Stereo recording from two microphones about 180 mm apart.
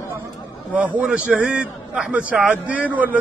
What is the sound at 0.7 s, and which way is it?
A man's voice, 10° right (ahead or behind).